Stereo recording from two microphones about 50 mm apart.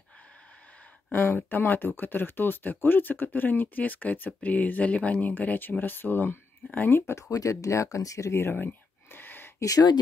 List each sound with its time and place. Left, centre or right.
1.1 s speech: left
7.0 s speech: left
8.4 s speech: left
8.6 s a sound: left